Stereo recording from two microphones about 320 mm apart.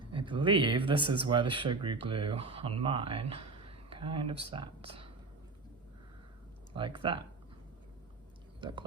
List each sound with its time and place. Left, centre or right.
0.0 s speech: centre
6.7 s speech: centre
8.6 s speech: centre